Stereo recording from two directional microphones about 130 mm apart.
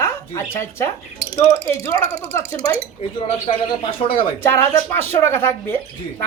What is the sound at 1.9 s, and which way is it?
Speech, 30° left (ahead or behind).